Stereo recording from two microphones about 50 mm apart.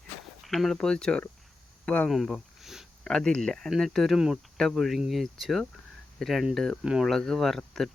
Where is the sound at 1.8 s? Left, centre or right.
Left.